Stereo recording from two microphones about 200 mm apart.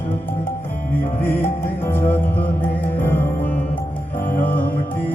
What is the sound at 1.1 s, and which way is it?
Music, 10° left (ahead or behind).